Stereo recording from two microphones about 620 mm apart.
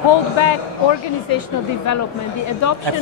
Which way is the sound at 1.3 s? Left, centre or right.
Left.